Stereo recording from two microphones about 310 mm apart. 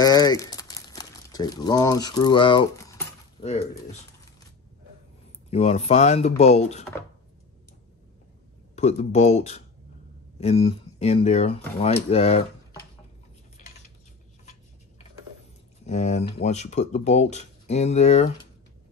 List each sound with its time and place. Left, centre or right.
0.0 s crumpling: centre
5.5 s speech: centre
8.7 s speech: left
13.6 s cutlery: left
15.8 s speech: left